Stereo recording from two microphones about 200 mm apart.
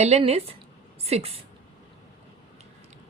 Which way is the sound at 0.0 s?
30° right (ahead or behind).